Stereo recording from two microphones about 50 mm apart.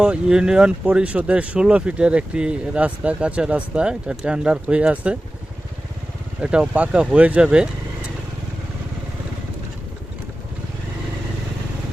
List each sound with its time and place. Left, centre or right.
0.0 s speech: centre
6.4 s speech: right